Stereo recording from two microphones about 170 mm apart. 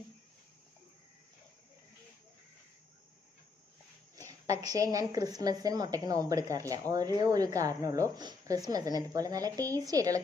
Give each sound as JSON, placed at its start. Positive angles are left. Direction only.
{"t": 4.3, "sound": "a woman's voice", "side_deg": -20}